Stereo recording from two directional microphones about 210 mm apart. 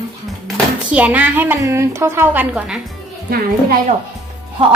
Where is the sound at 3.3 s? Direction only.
45° right (ahead or behind).